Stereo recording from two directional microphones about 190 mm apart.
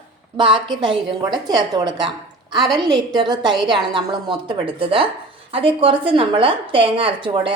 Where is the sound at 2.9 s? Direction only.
20° right (ahead or behind).